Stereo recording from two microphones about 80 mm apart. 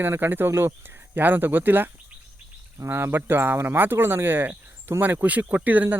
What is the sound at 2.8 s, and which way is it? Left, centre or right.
Speech, right.